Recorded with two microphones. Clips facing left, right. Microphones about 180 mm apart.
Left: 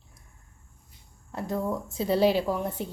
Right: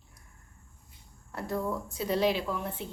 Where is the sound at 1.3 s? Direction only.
20° left (ahead or behind).